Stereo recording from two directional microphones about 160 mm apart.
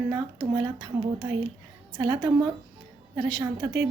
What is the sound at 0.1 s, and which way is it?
A woman's voice, 25° right (ahead or behind).